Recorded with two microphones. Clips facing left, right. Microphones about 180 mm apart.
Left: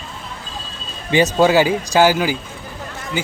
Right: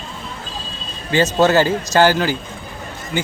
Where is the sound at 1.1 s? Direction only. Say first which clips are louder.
Left 1 dB; 15° left (ahead or behind).